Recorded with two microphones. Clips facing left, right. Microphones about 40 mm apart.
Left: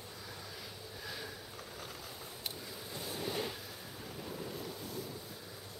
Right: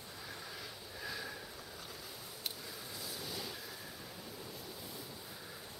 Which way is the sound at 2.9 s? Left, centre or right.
Left.